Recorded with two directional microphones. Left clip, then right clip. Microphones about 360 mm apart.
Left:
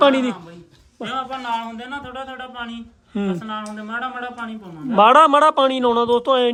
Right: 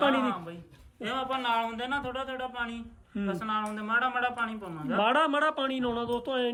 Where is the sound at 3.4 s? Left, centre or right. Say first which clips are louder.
Left 2 dB; centre.